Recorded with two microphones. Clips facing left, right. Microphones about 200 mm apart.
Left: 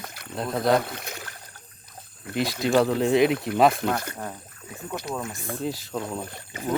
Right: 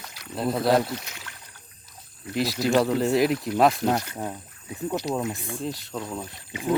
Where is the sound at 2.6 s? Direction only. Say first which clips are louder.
Left 1 dB; centre (ahead or behind).